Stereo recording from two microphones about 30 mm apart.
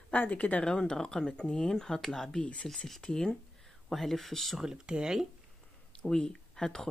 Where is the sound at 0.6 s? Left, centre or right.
Left.